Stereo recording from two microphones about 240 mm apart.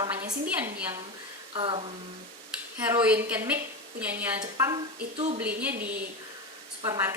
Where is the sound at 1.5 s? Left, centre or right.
Right.